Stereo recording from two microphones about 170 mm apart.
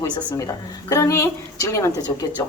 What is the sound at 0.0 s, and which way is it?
Speech, 15° left (ahead or behind).